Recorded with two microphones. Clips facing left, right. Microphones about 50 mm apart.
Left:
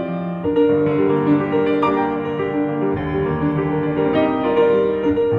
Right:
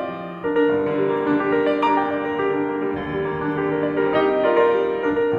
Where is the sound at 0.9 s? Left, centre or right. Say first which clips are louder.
Left 4 dB; left.